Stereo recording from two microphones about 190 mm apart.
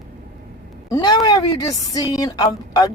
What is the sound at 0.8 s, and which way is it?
Speech, 20° left (ahead or behind).